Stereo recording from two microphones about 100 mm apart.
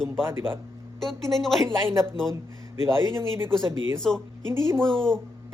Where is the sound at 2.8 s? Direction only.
25° right (ahead or behind).